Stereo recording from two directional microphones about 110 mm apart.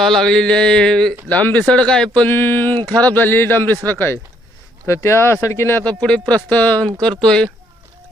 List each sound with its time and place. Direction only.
0.0 s speech: 5° left (ahead or behind)